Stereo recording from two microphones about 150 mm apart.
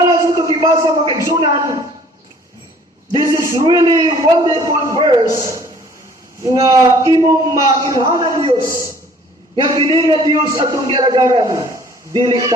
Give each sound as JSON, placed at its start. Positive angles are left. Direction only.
{"t": 0.1, "sound": "a sound", "side_deg": -25}
{"t": 3.1, "sound": "a man's voice", "side_deg": -25}
{"t": 8.6, "sound": "a man's voice", "side_deg": -20}